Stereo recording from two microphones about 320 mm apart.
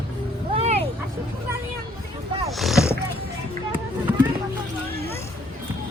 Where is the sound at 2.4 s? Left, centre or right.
Centre.